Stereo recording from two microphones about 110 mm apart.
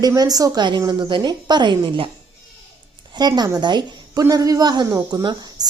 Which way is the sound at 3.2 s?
40° right (ahead or behind).